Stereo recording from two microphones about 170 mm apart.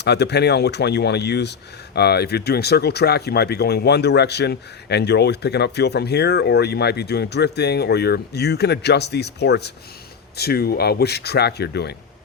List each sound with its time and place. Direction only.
0.0 s speech: 80° left
10.3 s speech: 70° left (ahead or behind)